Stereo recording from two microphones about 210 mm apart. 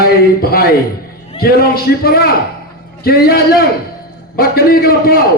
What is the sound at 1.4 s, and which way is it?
A man's voice, 45° left (ahead or behind).